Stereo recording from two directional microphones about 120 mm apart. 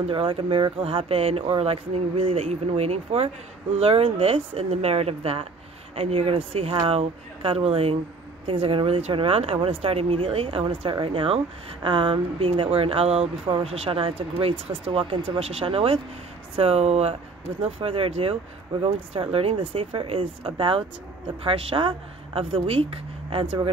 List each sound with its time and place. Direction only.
0.1 s speech: 45° right (ahead or behind)